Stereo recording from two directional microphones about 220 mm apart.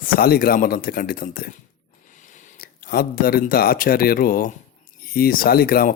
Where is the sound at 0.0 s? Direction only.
40° left (ahead or behind).